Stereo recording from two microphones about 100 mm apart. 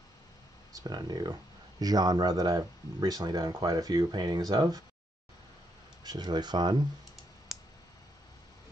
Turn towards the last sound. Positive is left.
turn(degrees=0)  # may be behind; listen again after turning